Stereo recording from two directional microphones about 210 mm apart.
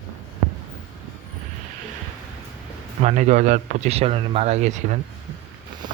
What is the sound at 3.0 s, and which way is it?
Speech, 35° right (ahead or behind).